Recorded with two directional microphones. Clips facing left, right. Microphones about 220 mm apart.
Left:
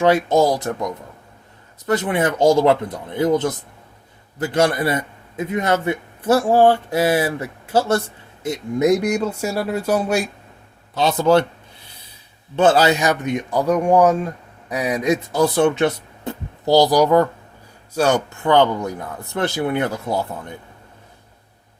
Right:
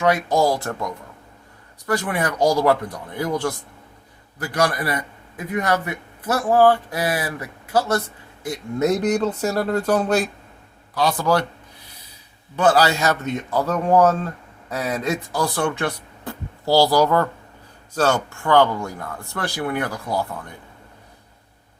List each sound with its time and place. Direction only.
0.0 s a man's voice: 25° left (ahead or behind)
8.4 s a man's voice: 15° left (ahead or behind)
10.9 s a man's voice: 25° left (ahead or behind)
12.5 s a man's voice: 25° left (ahead or behind)